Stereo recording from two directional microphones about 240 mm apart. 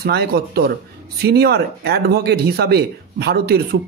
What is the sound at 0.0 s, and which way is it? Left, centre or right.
Speech, right.